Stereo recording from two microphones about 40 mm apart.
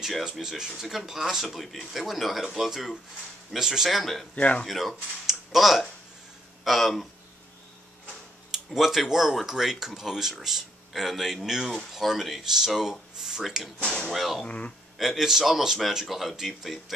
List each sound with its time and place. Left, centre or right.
0.2 s speech: centre
4.0 s speech: centre
4.4 s speech: left
4.6 s speech: centre
8.6 s speech: centre
14.4 s speech: left
15.0 s speech: centre